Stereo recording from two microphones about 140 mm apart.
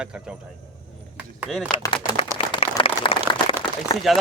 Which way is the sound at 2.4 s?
40° left (ahead or behind).